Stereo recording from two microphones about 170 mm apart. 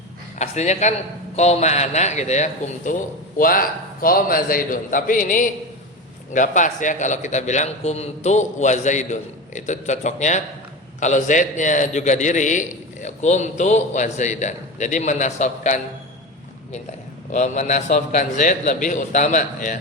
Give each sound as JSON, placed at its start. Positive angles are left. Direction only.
{"t": 0.3, "sound": "a man's voice", "side_deg": 40}
{"t": 17.3, "sound": "a man's voice", "side_deg": 45}